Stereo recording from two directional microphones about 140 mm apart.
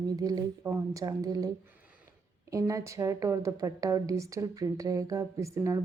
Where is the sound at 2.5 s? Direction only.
20° right (ahead or behind).